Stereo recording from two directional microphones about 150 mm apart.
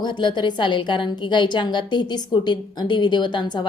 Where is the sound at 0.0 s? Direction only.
30° left (ahead or behind).